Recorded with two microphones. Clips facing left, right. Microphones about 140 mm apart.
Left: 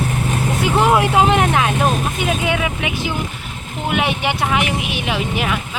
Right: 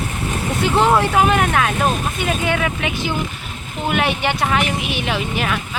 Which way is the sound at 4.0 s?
15° left (ahead or behind).